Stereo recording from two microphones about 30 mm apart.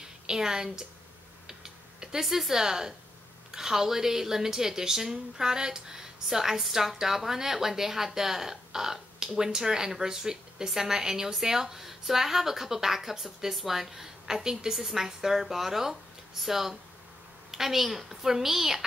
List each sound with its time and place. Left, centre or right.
0.3 s a woman's voice: right
1.5 s typing: centre
2.2 s speech: centre
2.5 s a woman's voice: centre